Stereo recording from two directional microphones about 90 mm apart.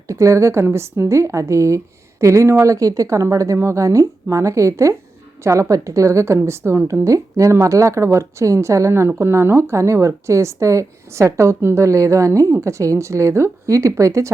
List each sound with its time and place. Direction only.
0.1 s a woman's voice: 35° right (ahead or behind)